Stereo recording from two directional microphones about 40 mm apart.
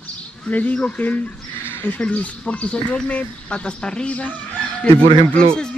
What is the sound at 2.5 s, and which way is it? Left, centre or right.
Speech, left.